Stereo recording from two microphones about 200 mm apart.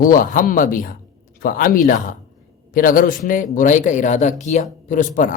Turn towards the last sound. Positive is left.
turn(degrees=40)  # may be behind; listen again after turning